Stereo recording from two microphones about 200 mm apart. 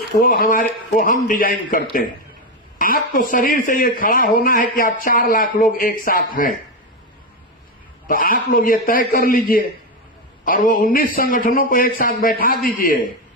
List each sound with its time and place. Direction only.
0.1 s speech: 45° left (ahead or behind)
8.0 s speech: 45° left (ahead or behind)